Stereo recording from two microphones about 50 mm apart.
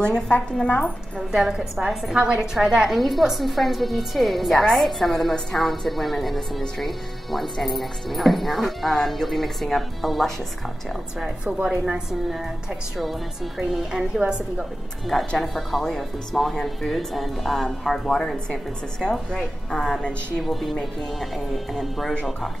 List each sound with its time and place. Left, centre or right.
0.3 s a woman's voice: centre
0.7 s a woman's voice: left
1.3 s a woman's voice: centre
2.1 s a woman's voice: centre
11.8 s speech: centre
13.6 s a woman's voice: centre
15.0 s a woman's voice: centre
21.7 s speech: centre